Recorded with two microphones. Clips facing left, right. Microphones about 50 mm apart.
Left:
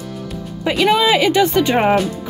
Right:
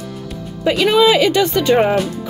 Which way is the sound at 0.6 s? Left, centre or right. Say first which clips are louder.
Right 2 dB; centre.